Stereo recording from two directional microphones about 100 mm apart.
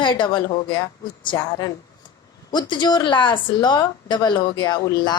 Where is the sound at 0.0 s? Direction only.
55° left (ahead or behind).